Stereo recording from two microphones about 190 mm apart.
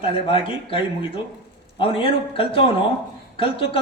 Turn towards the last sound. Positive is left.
turn(degrees=30)  # may be behind; listen again after turning